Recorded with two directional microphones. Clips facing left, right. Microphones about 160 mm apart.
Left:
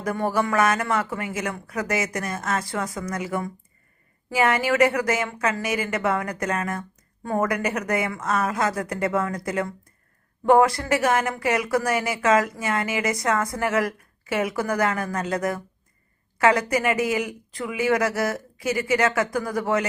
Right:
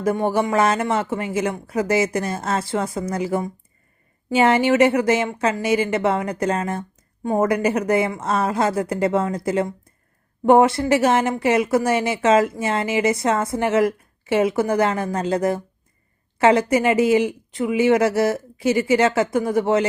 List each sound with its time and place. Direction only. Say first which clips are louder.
0.0 s speech: right 4 dB; 25° right (ahead or behind)